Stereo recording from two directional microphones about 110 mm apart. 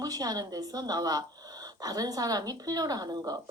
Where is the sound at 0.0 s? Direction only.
35° right (ahead or behind).